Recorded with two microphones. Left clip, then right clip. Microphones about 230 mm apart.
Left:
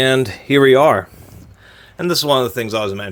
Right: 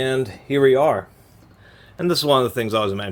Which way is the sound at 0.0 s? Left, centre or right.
Left.